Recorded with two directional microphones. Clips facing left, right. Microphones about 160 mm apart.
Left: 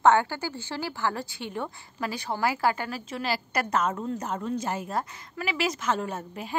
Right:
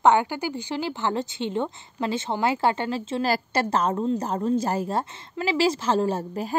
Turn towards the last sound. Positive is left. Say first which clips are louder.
# right 8 dB
turn(degrees=-35)  # may be behind; listen again after turning